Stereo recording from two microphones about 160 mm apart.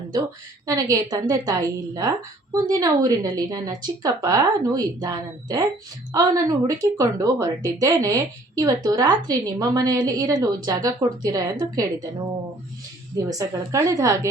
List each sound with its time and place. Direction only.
0.7 s speech: 20° right (ahead or behind)
13.4 s speech: 20° right (ahead or behind)